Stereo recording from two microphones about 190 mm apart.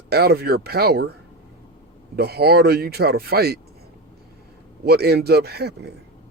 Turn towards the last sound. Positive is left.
turn(degrees=-55)  # may be behind; listen again after turning